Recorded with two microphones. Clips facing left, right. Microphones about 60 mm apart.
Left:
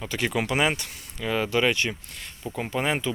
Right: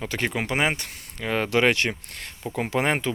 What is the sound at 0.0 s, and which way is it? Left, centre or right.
Speech, right.